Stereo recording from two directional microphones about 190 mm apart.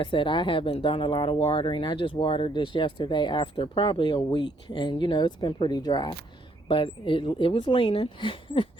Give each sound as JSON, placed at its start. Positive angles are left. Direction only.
{"t": 0.0, "sound": "speech", "side_deg": 25}